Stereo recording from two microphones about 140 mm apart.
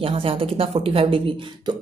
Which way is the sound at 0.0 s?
40° right (ahead or behind).